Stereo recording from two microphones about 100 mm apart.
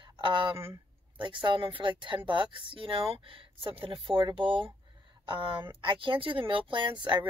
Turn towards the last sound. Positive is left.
turn(degrees=-50)  # may be behind; listen again after turning